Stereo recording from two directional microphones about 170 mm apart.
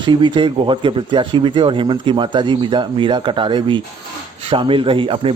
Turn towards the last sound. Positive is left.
turn(degrees=-30)  # may be behind; listen again after turning